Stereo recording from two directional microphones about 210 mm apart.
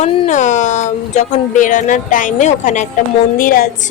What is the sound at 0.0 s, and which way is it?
A woman's voice, 35° left (ahead or behind).